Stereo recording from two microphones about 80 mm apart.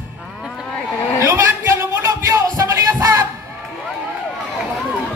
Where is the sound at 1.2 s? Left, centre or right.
Right.